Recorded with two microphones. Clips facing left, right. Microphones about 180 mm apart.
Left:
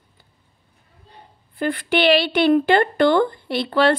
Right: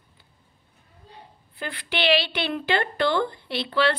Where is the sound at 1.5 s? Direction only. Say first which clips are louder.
Left 10 dB; 45° left (ahead or behind).